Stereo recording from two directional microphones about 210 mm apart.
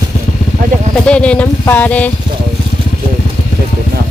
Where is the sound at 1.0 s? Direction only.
5° left (ahead or behind).